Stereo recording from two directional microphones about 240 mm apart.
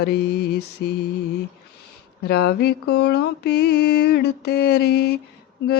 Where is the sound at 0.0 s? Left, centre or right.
Left.